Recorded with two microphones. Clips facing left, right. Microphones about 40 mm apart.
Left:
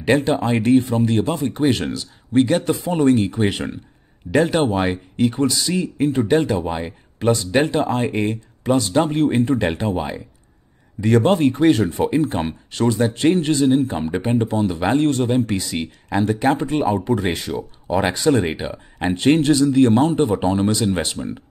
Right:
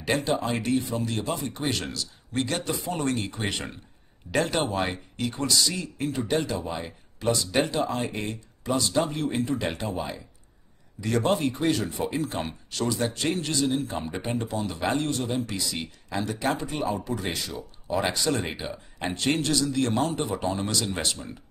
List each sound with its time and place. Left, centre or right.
0.0 s speech: left; by 4.7 s centre
4.7 s speech: left
12.2 s speech: left
14.0 s speech: centre
15.0 s speech: left